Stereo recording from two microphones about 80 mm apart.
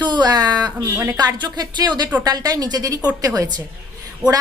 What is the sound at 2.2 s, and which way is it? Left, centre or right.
A woman's voice, right.